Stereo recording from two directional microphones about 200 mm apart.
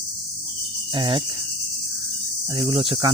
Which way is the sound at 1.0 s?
25° right (ahead or behind).